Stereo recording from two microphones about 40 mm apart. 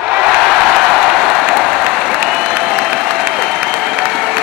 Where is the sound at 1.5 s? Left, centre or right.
Centre.